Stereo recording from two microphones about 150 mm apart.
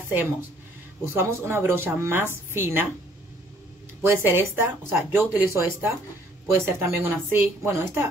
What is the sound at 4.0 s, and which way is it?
A woman's voice, 15° right (ahead or behind).